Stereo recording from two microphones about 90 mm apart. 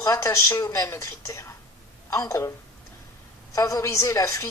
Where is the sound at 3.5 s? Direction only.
40° left (ahead or behind).